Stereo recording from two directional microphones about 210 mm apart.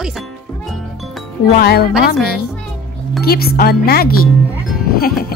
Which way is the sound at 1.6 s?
45° left (ahead or behind).